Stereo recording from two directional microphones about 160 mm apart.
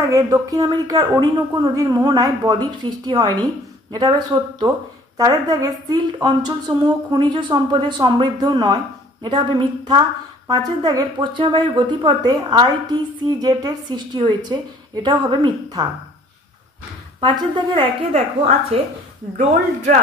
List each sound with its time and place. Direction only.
0.0 s a woman's voice: 20° right (ahead or behind)
17.2 s a woman's voice: 30° right (ahead or behind)